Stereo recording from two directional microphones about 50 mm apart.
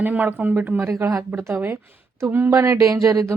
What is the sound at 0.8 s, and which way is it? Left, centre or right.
Speech, right.